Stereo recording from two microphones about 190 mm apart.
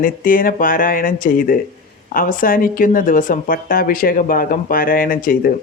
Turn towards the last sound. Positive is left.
turn(degrees=50)  # may be behind; listen again after turning